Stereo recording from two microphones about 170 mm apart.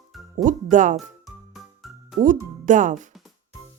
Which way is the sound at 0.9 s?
Centre (ahead or behind).